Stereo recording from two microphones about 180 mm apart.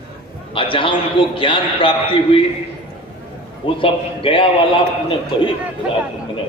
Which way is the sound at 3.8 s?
30° left (ahead or behind).